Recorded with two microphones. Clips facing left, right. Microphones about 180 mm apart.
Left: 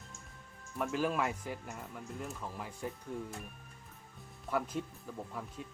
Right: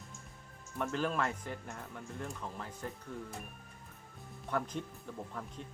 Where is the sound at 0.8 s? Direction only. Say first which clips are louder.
Left 1 dB; 10° left (ahead or behind).